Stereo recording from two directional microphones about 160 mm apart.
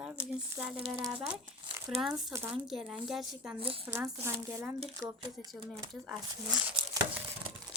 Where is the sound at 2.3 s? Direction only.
15° right (ahead or behind).